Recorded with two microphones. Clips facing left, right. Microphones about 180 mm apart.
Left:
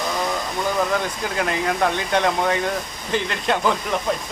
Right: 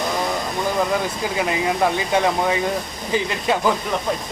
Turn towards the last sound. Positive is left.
turn(degrees=-10)  # may be behind; listen again after turning